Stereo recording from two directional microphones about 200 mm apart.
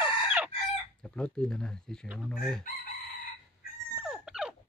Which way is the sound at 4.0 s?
5° right (ahead or behind).